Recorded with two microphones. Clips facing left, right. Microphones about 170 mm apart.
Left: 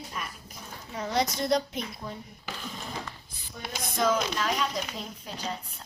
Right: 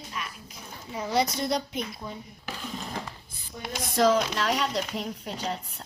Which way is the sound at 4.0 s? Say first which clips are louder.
Right 4 dB; 75° right (ahead or behind).